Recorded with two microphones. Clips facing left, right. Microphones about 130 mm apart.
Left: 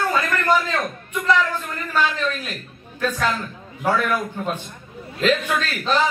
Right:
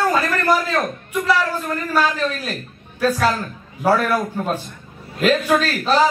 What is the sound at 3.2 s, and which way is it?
A man's voice, 35° right (ahead or behind).